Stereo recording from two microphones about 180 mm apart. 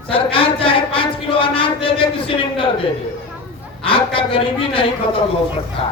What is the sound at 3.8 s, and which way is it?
A man's voice, 30° left (ahead or behind).